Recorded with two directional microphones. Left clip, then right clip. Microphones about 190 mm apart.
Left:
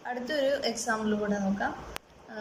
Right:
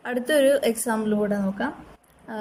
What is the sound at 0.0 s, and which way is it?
A woman's voice, 45° right (ahead or behind).